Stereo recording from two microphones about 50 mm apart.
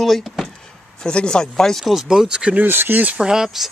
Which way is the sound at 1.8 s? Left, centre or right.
Centre.